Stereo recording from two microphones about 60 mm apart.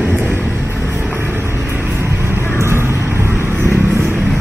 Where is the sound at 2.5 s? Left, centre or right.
Right.